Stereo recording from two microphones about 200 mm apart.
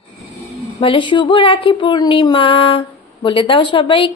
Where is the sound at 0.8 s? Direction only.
25° left (ahead or behind).